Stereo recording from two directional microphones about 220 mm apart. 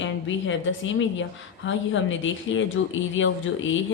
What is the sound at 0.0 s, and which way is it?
A woman's voice, 60° left (ahead or behind).